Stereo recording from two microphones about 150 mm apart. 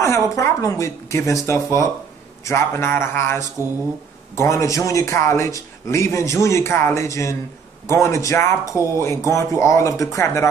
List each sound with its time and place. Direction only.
0.0 s a man's voice: 20° left (ahead or behind)